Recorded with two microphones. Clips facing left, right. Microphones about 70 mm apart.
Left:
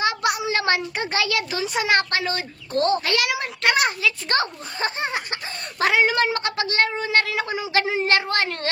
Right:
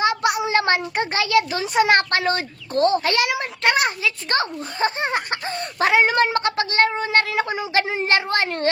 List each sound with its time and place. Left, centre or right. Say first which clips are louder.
0.0 s a sound: right 3 dB; right
1.8 s a child's voice: right 5 dB; right
2.8 s a child's voice: right 3 dB; right
5.1 s a child's voice: right 5 dB; right